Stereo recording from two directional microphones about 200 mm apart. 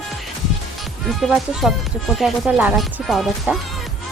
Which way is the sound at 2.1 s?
5° right (ahead or behind).